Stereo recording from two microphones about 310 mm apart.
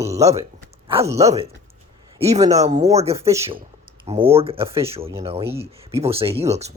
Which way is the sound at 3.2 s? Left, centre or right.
Centre.